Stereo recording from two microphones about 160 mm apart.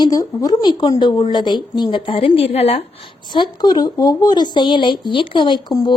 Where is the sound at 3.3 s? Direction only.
25° left (ahead or behind).